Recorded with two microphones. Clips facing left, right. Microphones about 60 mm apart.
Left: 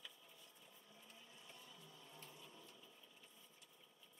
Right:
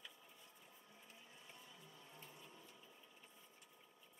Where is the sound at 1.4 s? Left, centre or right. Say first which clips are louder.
Even; right.